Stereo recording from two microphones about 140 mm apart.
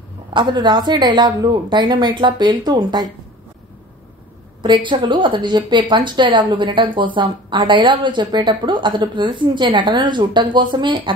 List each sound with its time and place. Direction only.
0.3 s a woman's voice: 35° right (ahead or behind)
4.6 s a woman's voice: 35° right (ahead or behind)